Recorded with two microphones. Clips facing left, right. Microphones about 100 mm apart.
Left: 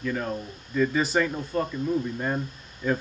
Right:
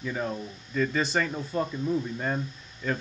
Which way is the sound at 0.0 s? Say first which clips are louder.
Left 2 dB; 5° right (ahead or behind).